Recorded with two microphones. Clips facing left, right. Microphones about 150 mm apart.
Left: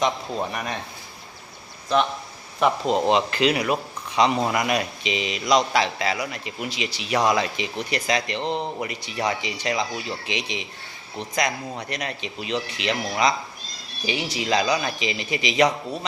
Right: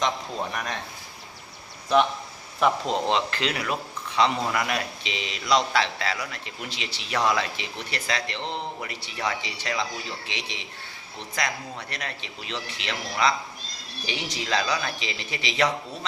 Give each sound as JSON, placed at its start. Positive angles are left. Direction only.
{"t": 0.5, "sound": "speech", "side_deg": 10}
{"t": 2.6, "sound": "speech", "side_deg": 5}